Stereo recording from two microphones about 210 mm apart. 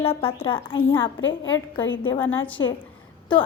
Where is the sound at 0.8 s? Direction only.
65° left (ahead or behind).